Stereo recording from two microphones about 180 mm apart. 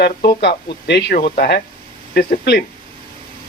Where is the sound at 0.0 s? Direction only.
60° left (ahead or behind).